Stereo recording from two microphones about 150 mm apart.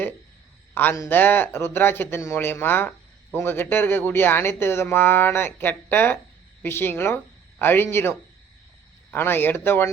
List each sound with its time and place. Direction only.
0.7 s speech: 10° left (ahead or behind)
9.1 s speech: 15° left (ahead or behind)